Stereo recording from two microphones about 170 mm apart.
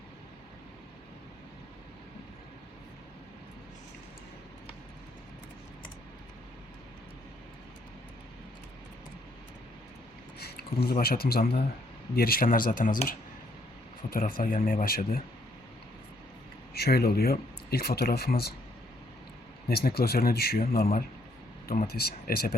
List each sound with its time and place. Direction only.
10.4 s a sound: 70° left (ahead or behind)
11.0 s speech: 65° left (ahead or behind)
16.7 s speech: 65° left (ahead or behind)
19.6 s speech: 65° left (ahead or behind)